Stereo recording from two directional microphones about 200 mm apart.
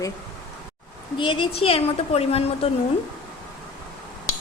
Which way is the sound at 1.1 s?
25° left (ahead or behind).